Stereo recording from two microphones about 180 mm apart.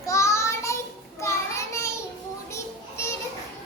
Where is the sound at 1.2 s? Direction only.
15° left (ahead or behind).